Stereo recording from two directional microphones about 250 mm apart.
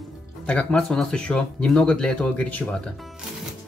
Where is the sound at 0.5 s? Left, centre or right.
Centre.